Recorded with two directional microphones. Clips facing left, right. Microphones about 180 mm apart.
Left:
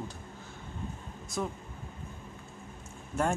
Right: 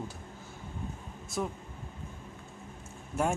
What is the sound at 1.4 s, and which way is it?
Speech, 5° right (ahead or behind).